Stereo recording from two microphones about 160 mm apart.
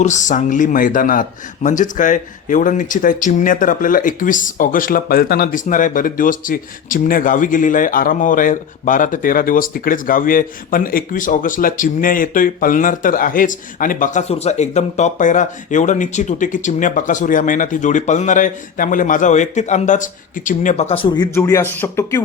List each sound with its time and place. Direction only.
0.0 s a man's voice: 50° left (ahead or behind)
20.9 s speech: 30° left (ahead or behind); by 22.2 s 15° left (ahead or behind)